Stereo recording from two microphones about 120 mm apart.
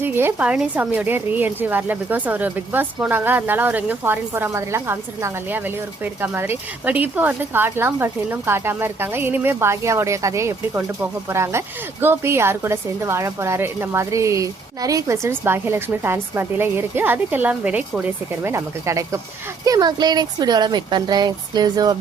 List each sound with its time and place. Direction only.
0.0 s a woman's voice: 20° right (ahead or behind)
18.5 s speech: 25° right (ahead or behind)